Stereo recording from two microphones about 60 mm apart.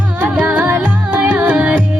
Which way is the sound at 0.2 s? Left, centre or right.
Right.